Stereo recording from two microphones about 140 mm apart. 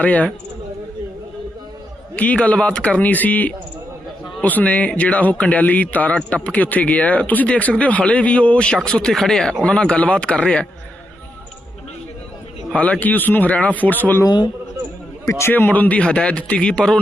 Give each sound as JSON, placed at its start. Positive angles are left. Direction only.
{"t": 0.0, "sound": "speech", "side_deg": 10}
{"t": 2.1, "sound": "speech", "side_deg": 10}
{"t": 12.7, "sound": "speech", "side_deg": 10}
{"t": 14.3, "sound": "a man's voice", "side_deg": 30}
{"t": 15.3, "sound": "speech", "side_deg": 20}